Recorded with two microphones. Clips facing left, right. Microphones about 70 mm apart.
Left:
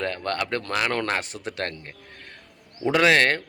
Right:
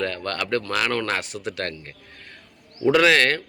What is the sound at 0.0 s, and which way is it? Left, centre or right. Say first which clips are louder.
A man's voice: even; left.